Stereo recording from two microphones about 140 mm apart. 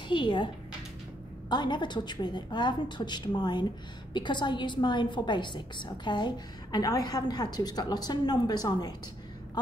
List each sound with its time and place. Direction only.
0.1 s a woman's voice: 35° left (ahead or behind)
1.5 s a woman's voice: 35° left (ahead or behind)